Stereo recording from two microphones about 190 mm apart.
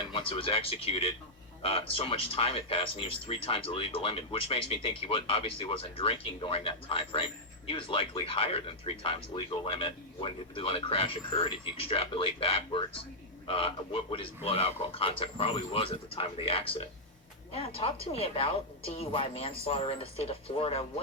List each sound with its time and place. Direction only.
0.1 s a woman's voice: 30° left (ahead or behind)